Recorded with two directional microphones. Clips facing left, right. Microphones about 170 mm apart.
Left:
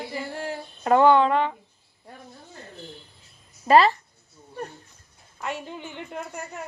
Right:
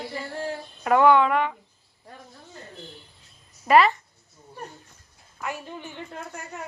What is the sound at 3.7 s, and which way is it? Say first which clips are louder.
Speech: left 1 dB; 30° left (ahead or behind).